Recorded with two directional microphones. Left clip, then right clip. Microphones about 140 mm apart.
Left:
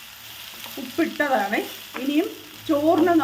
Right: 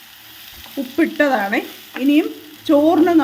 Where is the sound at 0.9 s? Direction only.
90° right.